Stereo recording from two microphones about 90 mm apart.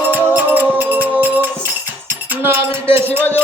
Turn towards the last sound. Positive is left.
turn(degrees=-25)  # may be behind; listen again after turning